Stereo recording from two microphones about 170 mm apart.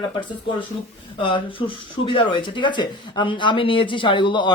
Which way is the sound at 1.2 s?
30° left (ahead or behind).